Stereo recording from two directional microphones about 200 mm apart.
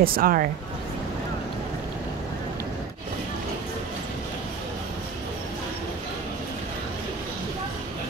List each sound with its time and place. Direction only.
0.0 s speech: 45° right (ahead or behind)